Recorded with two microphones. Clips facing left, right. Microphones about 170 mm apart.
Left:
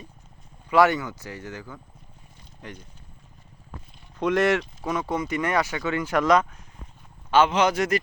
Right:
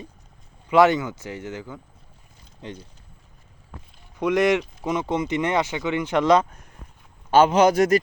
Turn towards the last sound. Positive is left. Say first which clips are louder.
# right 5 dB
turn(degrees=-40)  # may be behind; listen again after turning